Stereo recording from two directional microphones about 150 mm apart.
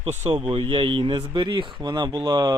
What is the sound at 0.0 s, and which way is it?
Speech, 45° right (ahead or behind).